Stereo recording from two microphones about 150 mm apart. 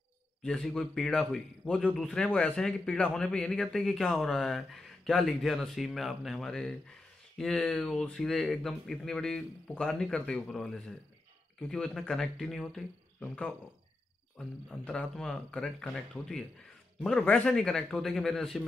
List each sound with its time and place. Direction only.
0.4 s speech: 5° left (ahead or behind)
14.7 s speech: 5° left (ahead or behind)